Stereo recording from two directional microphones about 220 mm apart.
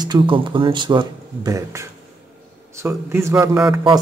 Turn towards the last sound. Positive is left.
turn(degrees=-5)  # may be behind; listen again after turning